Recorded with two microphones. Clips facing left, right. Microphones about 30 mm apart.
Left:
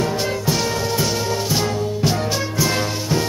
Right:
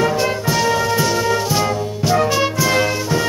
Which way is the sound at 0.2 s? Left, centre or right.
Centre.